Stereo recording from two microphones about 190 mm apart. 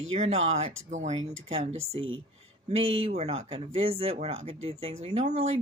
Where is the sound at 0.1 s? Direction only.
35° right (ahead or behind).